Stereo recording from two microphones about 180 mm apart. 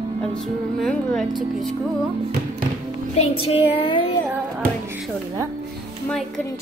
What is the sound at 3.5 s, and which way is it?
Child singing, 30° left (ahead or behind).